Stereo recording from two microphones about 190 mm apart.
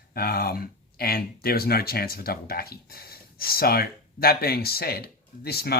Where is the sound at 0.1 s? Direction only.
50° left (ahead or behind).